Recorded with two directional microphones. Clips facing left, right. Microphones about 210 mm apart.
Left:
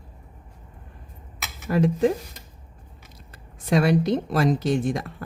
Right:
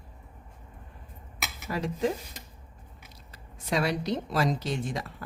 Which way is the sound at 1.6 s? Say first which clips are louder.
Left 9 dB; 55° left (ahead or behind).